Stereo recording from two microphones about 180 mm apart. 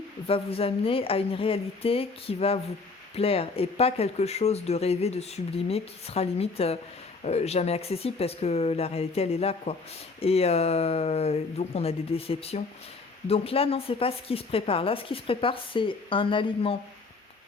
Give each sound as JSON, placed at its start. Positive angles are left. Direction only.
{"t": 0.3, "sound": "speech", "side_deg": 30}